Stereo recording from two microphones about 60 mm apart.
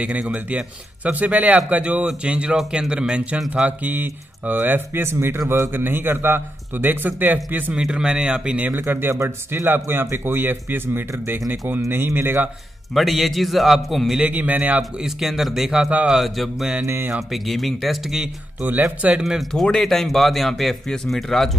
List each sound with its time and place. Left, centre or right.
0.0 s a man's voice: right
3.8 s a man's voice: right
7.7 s speech: centre
8.8 s a man's voice: right
12.9 s speech: centre
14.2 s a man's voice: right
14.8 s speech: centre
16.8 s a man's voice: right
17.1 s speech: centre
18.6 s a man's voice: right
19.5 s speech: centre